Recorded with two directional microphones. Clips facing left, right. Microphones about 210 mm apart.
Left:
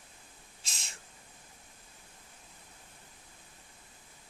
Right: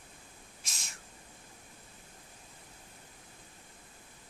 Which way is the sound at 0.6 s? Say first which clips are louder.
Left 1 dB; 25° left (ahead or behind).